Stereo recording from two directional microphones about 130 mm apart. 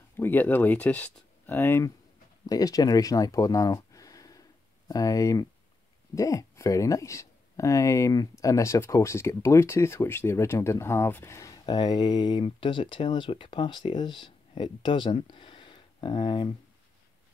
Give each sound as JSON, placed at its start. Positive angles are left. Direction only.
{"t": 0.2, "sound": "speech", "side_deg": 15}